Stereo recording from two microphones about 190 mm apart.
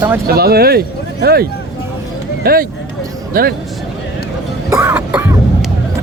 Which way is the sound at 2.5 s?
50° right (ahead or behind).